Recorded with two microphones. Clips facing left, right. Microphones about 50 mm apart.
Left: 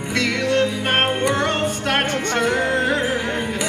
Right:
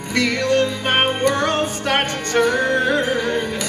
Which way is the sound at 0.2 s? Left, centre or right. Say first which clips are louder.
Right 2 dB; centre.